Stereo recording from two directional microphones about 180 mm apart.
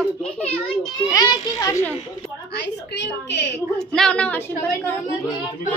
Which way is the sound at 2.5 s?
70° left (ahead or behind).